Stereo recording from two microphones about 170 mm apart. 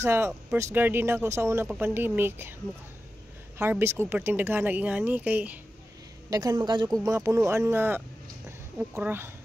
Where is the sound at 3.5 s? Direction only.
15° right (ahead or behind).